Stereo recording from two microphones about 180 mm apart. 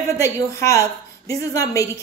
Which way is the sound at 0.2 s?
15° left (ahead or behind).